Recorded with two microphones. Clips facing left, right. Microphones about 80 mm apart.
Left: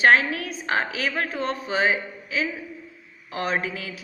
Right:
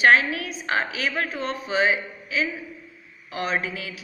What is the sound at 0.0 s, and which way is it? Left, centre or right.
A woman's voice, left.